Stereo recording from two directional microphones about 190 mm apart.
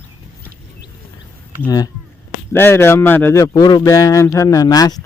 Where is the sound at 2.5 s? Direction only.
10° left (ahead or behind).